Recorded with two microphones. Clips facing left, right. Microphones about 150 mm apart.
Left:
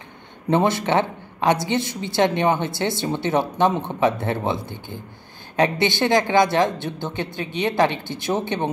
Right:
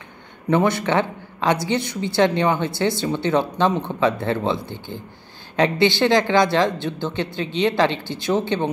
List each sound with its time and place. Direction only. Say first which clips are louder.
0.5 s speech: even; 20° left (ahead or behind)
5.6 s speech: right 2 dB; 20° left (ahead or behind)